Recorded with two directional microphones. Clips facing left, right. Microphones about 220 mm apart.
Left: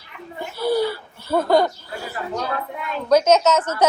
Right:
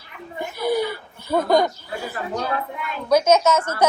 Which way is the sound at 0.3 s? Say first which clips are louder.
Left 1 dB; 15° right (ahead or behind).